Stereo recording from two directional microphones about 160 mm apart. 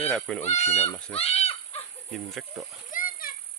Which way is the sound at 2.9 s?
60° left (ahead or behind).